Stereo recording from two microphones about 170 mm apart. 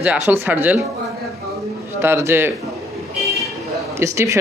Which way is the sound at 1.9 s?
15° right (ahead or behind).